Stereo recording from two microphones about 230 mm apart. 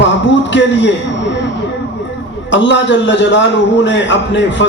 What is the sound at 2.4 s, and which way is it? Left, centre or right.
Speech, left.